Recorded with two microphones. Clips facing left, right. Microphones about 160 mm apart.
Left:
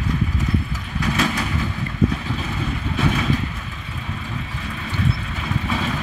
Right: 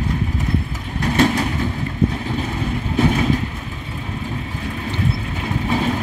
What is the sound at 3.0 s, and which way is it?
Vehicle, 35° right (ahead or behind).